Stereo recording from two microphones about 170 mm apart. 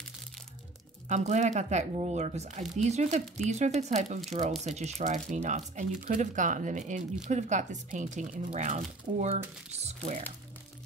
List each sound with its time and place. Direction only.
1.0 s speech: 40° right (ahead or behind)